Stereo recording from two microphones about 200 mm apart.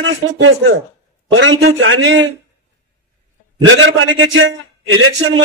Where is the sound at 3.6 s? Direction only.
75° right (ahead or behind).